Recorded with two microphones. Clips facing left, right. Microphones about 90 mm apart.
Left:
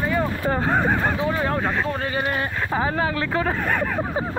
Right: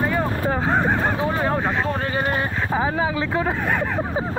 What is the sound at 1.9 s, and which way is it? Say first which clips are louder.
Speech: right 2 dB; 30° right (ahead or behind).